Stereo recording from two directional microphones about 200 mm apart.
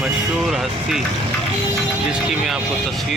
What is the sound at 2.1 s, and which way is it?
Speech, centre (ahead or behind).